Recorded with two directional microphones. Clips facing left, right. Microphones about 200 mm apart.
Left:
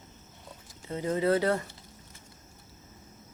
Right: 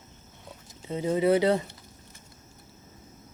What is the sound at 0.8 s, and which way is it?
Speech, 20° right (ahead or behind).